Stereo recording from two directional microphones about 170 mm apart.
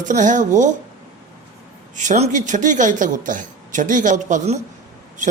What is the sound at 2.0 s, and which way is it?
Speech, 45° right (ahead or behind).